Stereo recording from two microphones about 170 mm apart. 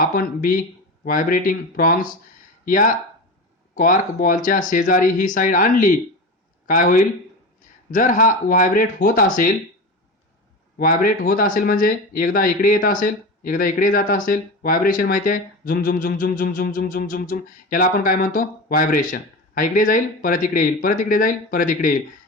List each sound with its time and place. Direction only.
0.0 s speech: 55° left (ahead or behind)
10.8 s speech: 55° left (ahead or behind)